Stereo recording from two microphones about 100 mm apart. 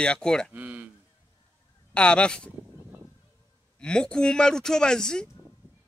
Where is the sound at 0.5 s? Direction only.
15° right (ahead or behind).